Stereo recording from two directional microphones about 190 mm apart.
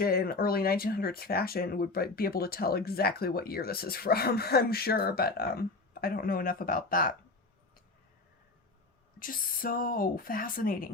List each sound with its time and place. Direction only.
0.0 s speech: 50° left (ahead or behind)
9.1 s speech: 50° left (ahead or behind)